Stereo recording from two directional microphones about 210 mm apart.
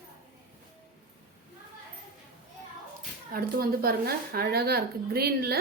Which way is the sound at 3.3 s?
45° right (ahead or behind).